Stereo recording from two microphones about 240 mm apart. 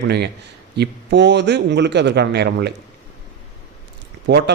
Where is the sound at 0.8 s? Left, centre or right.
Right.